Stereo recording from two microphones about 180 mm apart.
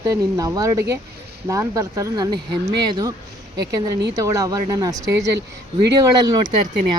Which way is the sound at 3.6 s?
20° right (ahead or behind).